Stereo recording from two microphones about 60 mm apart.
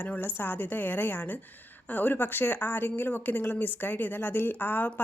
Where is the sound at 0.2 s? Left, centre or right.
Left.